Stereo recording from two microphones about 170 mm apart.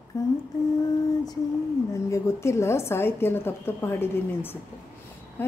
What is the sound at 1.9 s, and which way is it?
A woman's voice, 15° left (ahead or behind).